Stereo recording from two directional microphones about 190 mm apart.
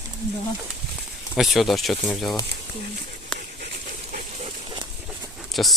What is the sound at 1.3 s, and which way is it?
Speech, centre (ahead or behind).